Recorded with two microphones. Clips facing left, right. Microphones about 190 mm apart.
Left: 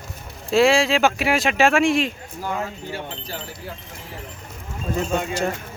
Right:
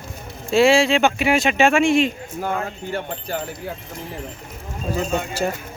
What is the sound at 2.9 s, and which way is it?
Wind chime, 55° right (ahead or behind).